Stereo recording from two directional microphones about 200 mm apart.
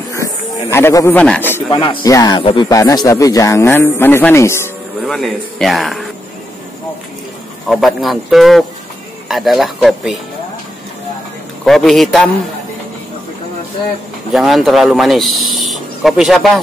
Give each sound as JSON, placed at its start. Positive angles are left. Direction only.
{"t": 0.1, "sound": "speech", "side_deg": 15}
{"t": 1.7, "sound": "speech", "side_deg": 25}
{"t": 5.0, "sound": "speech", "side_deg": 0}
{"t": 7.6, "sound": "speech", "side_deg": 0}
{"t": 11.6, "sound": "speech", "side_deg": 0}
{"t": 14.3, "sound": "speech", "side_deg": 0}